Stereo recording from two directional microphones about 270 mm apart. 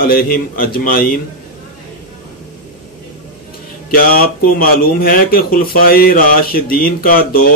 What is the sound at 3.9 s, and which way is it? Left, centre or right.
Speech, left.